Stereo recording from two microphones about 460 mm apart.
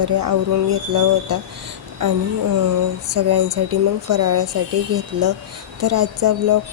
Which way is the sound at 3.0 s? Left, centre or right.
Right.